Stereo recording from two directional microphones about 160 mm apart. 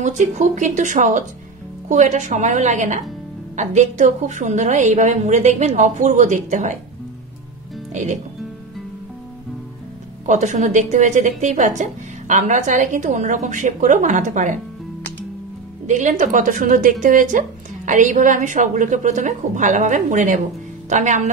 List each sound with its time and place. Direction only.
0.0 s a woman's voice: 50° right (ahead or behind)
7.9 s speech: 50° right (ahead or behind)
10.2 s a woman's voice: 50° right (ahead or behind)
15.9 s a woman's voice: 50° right (ahead or behind)